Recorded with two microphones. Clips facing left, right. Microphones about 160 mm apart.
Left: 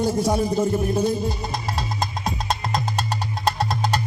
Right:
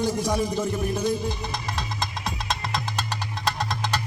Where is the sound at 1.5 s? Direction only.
35° left (ahead or behind).